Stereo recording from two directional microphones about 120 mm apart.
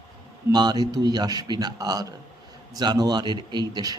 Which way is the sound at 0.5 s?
35° right (ahead or behind).